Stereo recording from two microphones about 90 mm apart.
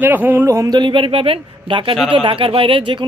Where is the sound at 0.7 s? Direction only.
60° right (ahead or behind).